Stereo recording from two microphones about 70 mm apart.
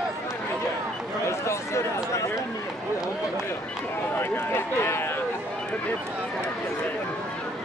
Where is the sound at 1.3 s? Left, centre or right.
Left.